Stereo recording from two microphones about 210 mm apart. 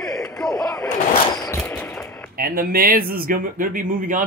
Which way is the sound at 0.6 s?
15° left (ahead or behind).